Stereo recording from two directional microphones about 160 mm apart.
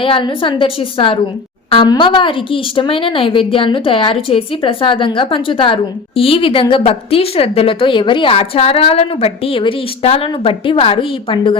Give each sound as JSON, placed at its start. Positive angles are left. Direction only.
{"t": 0.0, "sound": "speech", "side_deg": 35}